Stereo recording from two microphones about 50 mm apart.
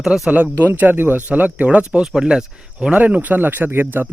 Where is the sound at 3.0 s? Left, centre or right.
Right.